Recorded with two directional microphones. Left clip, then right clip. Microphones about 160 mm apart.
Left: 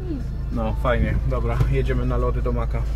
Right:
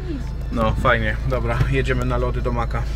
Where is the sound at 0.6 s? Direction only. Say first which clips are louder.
Right 5 dB; 20° right (ahead or behind).